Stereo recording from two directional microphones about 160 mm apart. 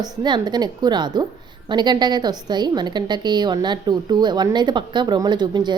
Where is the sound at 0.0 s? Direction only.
25° right (ahead or behind).